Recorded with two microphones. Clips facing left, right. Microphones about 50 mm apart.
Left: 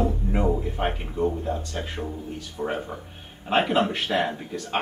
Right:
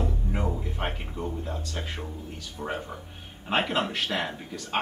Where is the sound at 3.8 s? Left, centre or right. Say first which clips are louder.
Left 5 dB; centre.